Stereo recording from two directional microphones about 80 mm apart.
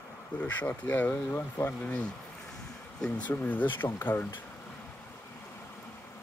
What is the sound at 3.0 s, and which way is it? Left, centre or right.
Speech, centre.